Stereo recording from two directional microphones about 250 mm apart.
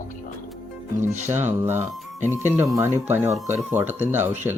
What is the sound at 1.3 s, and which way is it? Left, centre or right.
Speech, centre.